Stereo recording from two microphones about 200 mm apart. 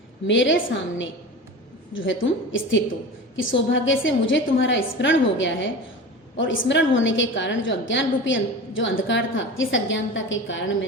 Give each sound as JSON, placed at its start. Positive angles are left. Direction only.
{"t": 0.3, "sound": "a woman's voice", "side_deg": 65}